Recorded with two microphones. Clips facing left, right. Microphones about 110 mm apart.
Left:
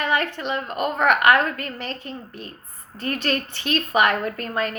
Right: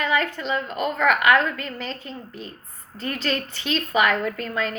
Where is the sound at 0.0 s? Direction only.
55° left (ahead or behind).